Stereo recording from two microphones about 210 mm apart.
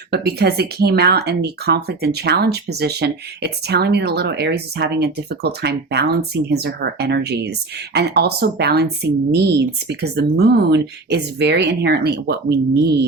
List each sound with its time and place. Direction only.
0.1 s speech: 50° right (ahead or behind)